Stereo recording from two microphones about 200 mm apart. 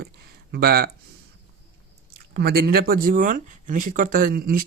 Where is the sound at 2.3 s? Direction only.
50° right (ahead or behind).